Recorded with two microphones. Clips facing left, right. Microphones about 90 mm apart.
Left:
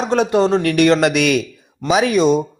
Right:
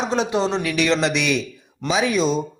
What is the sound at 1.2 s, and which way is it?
Speech, 65° left (ahead or behind).